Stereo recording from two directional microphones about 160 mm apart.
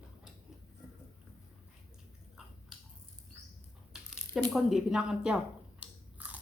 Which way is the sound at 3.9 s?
5° right (ahead or behind).